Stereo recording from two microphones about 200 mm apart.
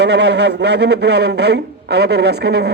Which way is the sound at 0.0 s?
60° right (ahead or behind).